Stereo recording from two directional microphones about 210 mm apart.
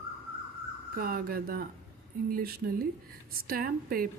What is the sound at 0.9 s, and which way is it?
A woman's voice, 45° right (ahead or behind).